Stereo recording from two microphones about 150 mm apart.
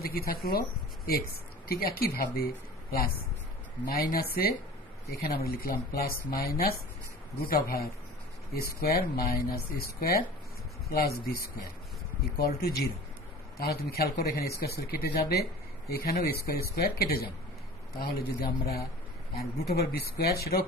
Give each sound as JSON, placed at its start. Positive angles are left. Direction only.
{"t": 0.3, "sound": "speech", "side_deg": 90}